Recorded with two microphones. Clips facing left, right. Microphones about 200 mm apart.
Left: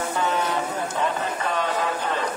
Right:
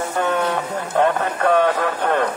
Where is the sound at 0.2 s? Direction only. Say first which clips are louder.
Right 5 dB; 60° right (ahead or behind).